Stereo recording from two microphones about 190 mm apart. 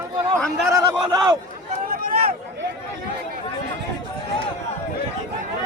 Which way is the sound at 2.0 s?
50° right (ahead or behind).